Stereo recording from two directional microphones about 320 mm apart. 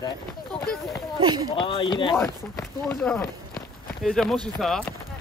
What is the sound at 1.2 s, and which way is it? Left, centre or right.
Speech, centre.